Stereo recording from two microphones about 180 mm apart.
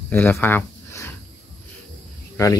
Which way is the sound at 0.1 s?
10° left (ahead or behind).